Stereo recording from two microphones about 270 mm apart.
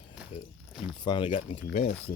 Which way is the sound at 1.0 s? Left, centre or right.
Centre.